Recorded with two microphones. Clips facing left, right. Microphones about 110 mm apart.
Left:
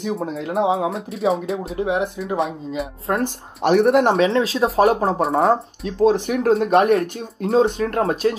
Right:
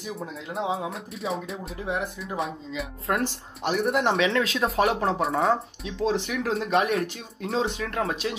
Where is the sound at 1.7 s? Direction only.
60° left (ahead or behind).